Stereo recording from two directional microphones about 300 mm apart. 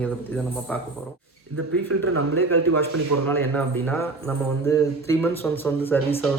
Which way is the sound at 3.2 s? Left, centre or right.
Centre.